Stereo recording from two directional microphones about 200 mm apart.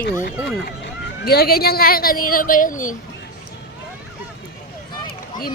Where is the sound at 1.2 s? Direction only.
50° left (ahead or behind).